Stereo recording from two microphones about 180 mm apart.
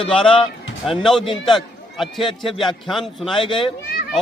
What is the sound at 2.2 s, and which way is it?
Speech, 25° left (ahead or behind).